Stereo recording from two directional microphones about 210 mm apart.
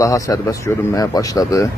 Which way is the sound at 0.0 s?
15° left (ahead or behind).